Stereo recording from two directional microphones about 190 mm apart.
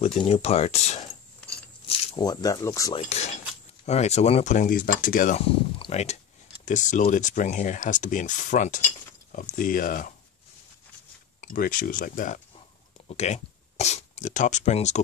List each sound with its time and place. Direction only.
0.0 s speech: 30° left (ahead or behind)
1.9 s speech: 20° left (ahead or behind)
3.0 s speech: 35° left (ahead or behind)
5.8 s speech: 35° left (ahead or behind)
11.4 s speech: 45° left (ahead or behind)